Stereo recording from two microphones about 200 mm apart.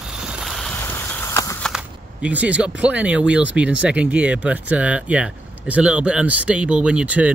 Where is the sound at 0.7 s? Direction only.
10° left (ahead or behind).